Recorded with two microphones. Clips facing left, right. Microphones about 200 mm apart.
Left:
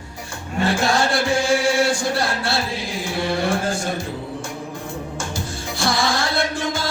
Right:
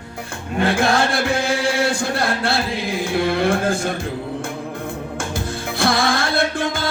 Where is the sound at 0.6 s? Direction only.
55° right (ahead or behind).